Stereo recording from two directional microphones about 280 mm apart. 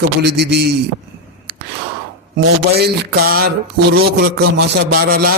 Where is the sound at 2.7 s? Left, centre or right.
Right.